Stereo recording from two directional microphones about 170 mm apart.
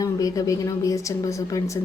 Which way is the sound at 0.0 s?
20° left (ahead or behind).